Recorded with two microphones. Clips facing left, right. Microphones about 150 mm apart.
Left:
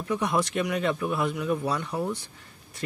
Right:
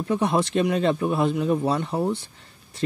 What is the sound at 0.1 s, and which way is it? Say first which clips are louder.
Speech: right 4 dB; 30° right (ahead or behind).